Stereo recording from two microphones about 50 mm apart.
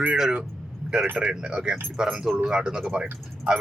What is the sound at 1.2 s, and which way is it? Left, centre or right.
Speech, centre.